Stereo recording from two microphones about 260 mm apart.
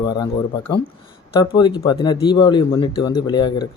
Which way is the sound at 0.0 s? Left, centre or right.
Centre.